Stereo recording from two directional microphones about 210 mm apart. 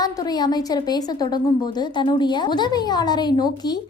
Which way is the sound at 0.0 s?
20° left (ahead or behind).